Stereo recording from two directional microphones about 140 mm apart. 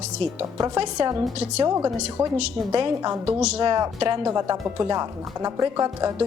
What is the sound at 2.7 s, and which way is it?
Speech, 30° right (ahead or behind).